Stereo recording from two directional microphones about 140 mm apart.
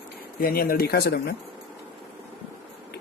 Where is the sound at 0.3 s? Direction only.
90° left.